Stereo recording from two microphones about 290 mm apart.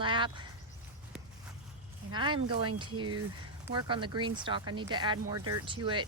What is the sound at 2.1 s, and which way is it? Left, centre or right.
Speech, centre.